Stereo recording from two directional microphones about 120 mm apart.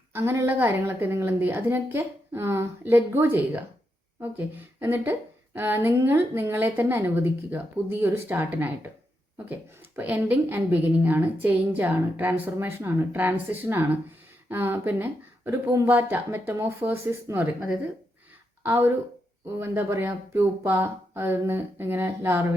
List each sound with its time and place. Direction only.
0.1 s a woman's voice: 20° right (ahead or behind)